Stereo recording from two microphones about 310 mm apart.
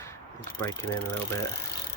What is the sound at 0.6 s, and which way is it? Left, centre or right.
Speech, centre.